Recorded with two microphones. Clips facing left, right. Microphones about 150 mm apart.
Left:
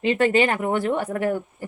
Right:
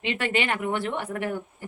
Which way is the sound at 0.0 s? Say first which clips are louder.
Left 8 dB; 40° left (ahead or behind).